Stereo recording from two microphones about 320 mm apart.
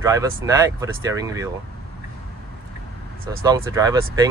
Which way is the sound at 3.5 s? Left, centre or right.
Centre.